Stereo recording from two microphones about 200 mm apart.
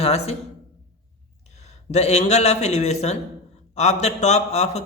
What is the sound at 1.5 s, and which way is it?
A man's voice, 35° left (ahead or behind).